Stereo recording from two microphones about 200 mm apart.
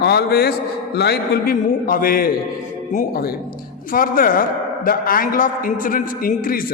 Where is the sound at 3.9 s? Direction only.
45° left (ahead or behind).